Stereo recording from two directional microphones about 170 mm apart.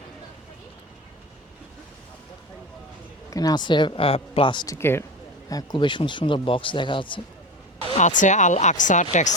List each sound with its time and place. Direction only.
3.2 s speech: 20° left (ahead or behind)
7.9 s speech: 45° left (ahead or behind)